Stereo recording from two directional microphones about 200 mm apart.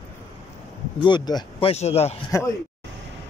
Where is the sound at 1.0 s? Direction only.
20° left (ahead or behind).